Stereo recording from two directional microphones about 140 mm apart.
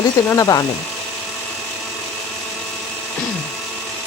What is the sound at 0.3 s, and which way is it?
Speech, 20° left (ahead or behind).